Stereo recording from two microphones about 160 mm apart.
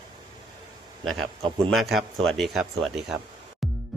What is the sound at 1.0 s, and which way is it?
A man's voice, centre (ahead or behind).